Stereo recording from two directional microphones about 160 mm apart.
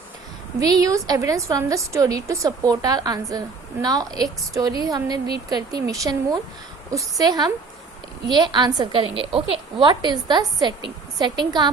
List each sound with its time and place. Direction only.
0.6 s a woman's voice: 25° right (ahead or behind)